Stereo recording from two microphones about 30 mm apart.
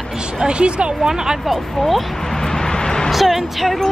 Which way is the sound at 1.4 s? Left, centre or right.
Centre.